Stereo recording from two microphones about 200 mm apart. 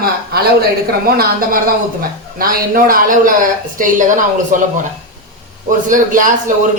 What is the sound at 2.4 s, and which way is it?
A woman's voice, 45° right (ahead or behind).